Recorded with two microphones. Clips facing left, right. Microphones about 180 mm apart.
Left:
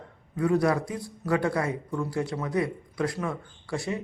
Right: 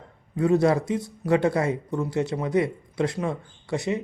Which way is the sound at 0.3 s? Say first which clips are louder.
Right 4 dB; 25° right (ahead or behind).